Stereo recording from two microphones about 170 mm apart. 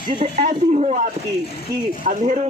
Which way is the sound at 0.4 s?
45° right (ahead or behind).